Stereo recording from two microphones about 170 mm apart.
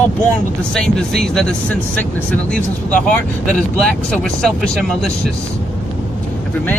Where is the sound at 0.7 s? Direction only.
5° left (ahead or behind).